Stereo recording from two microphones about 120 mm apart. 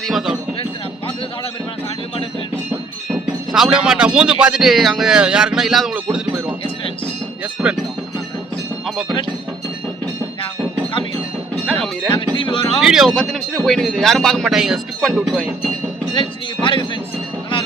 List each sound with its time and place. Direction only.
0.0 s a sound: centre (ahead or behind)
3.1 s speech: 5° right (ahead or behind)
11.6 s speech: 5° left (ahead or behind)
12.4 s music: 45° left (ahead or behind)
12.8 s speech: 5° right (ahead or behind)
16.1 s speech: 40° left (ahead or behind)